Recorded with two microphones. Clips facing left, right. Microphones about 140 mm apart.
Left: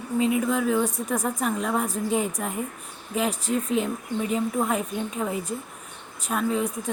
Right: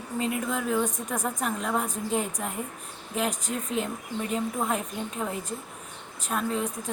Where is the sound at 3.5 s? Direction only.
Centre (ahead or behind).